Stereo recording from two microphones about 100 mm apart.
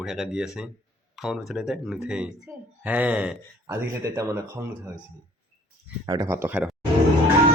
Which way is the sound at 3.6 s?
30° right (ahead or behind).